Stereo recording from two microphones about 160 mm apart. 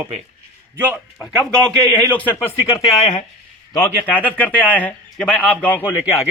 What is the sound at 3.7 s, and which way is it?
A man's voice, 15° left (ahead or behind).